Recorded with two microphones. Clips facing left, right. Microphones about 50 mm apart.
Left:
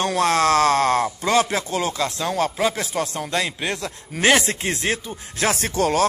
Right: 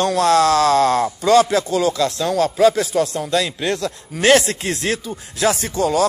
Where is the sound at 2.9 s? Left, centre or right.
Left.